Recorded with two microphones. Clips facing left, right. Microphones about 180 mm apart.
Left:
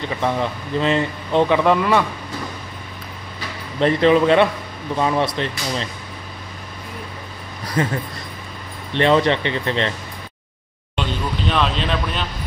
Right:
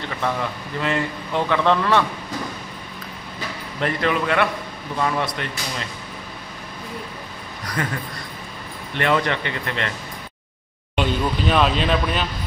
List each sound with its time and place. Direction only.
0.2 s speech: 20° left (ahead or behind)
3.8 s speech: 25° left (ahead or behind)
7.6 s speech: 25° left (ahead or behind)
8.9 s speech: 25° left (ahead or behind)
11.0 s speech: 5° right (ahead or behind)